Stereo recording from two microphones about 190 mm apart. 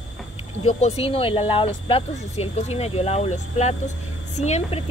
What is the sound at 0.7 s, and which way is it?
Speech, 35° left (ahead or behind).